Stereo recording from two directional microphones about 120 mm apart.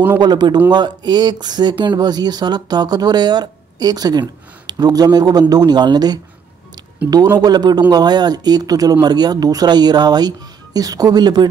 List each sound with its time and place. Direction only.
0.2 s speech: 35° right (ahead or behind)